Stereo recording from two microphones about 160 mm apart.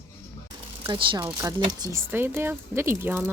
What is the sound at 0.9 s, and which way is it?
Speech, 30° right (ahead or behind).